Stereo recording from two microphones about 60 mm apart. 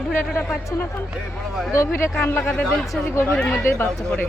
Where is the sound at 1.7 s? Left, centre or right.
Left.